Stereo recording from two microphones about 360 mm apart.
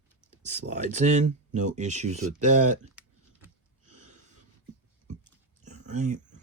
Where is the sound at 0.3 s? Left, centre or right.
Centre.